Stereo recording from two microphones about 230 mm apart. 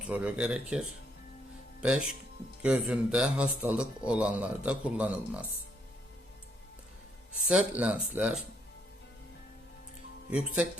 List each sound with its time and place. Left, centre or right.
0.1 s speech: centre
7.4 s speech: centre
10.2 s speech: centre